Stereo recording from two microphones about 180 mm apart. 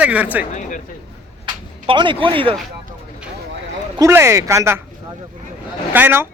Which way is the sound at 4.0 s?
15° right (ahead or behind).